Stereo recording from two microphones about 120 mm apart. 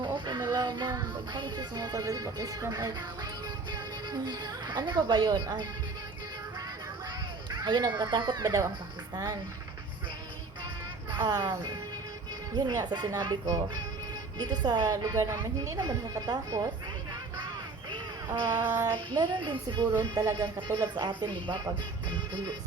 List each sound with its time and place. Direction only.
0.0 s music: 40° right (ahead or behind)
3.7 s speech: 35° right (ahead or behind)
7.5 s a sound: 35° right (ahead or behind)
7.9 s a woman's voice: 40° right (ahead or behind)
11.2 s a woman's voice: 35° right (ahead or behind)
17.9 s music: 35° right (ahead or behind)
18.9 s a woman's voice: 40° right (ahead or behind)
20.0 s a woman's voice: 30° right (ahead or behind)